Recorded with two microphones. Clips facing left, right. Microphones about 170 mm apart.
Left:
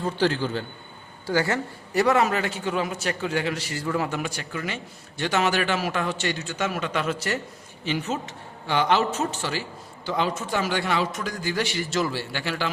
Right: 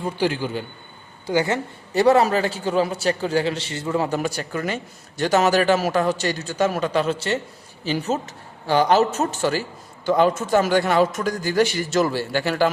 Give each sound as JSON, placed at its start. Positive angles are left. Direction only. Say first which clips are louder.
{"t": 0.0, "sound": "a man's voice", "louder": "right 1 dB", "side_deg": -10}